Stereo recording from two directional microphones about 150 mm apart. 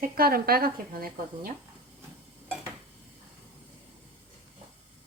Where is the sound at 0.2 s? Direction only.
90° right; by 1.5 s 70° right (ahead or behind).